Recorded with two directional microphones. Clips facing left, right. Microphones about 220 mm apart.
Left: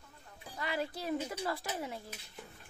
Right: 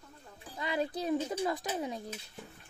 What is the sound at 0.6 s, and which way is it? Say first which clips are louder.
Speech: right 4 dB; 20° right (ahead or behind).